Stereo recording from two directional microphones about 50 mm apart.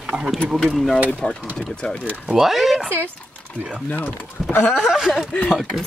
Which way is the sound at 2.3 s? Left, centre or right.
Centre.